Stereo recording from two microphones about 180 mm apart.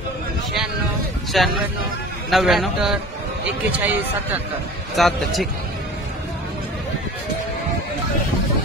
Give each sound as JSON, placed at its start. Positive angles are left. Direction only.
{"t": 1.3, "sound": "a man's voice", "side_deg": 0}